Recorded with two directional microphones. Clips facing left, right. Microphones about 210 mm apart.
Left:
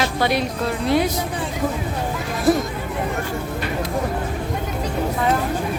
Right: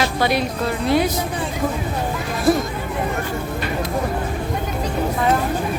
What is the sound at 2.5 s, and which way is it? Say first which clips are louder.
Speech: even; 20° left (ahead or behind).